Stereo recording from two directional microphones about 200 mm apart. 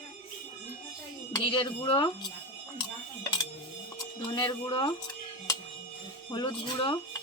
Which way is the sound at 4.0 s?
20° left (ahead or behind).